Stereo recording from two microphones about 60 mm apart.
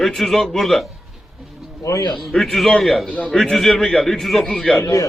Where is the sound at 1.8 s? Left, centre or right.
Left.